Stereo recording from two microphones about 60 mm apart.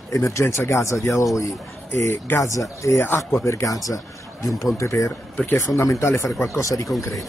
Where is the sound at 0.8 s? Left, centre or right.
Left.